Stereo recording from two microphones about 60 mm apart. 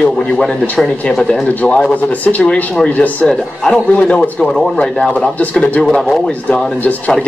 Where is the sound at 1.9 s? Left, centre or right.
Left.